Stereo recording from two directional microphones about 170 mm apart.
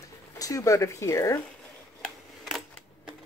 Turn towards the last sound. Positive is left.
turn(degrees=0)  # may be behind; listen again after turning